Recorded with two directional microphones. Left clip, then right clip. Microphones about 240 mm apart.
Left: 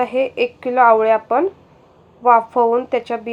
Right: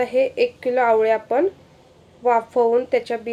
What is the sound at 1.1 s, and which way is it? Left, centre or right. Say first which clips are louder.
A woman's voice: left 3 dB; left.